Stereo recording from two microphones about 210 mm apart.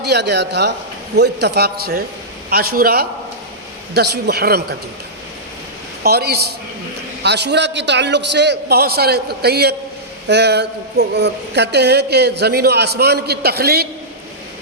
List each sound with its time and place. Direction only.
0.0 s speech: 50° right (ahead or behind)
6.0 s a man's voice: 50° right (ahead or behind)